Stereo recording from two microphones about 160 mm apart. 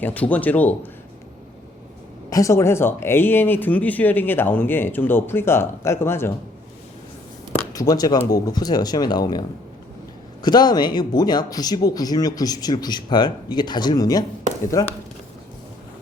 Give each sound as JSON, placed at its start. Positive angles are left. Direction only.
{"t": 0.0, "sound": "speech", "side_deg": 10}
{"t": 2.3, "sound": "speech", "side_deg": 20}
{"t": 7.7, "sound": "speech", "side_deg": 25}
{"t": 10.4, "sound": "speech", "side_deg": 25}